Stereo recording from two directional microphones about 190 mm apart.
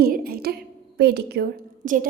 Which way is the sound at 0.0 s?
50° right (ahead or behind).